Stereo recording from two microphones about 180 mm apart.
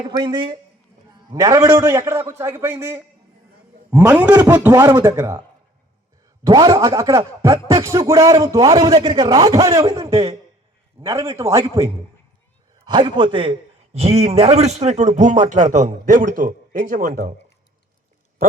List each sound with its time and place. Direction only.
0.0 s a man's voice: 25° right (ahead or behind)
6.4 s speech: 20° right (ahead or behind)
11.0 s a man's voice: 30° right (ahead or behind)
11.3 s a man's voice: 15° right (ahead or behind); by 17.3 s 45° right (ahead or behind)